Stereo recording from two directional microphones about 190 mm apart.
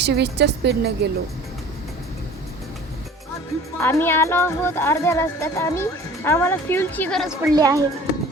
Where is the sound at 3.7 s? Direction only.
15° left (ahead or behind).